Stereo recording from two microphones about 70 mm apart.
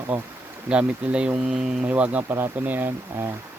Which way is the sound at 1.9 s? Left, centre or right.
Centre.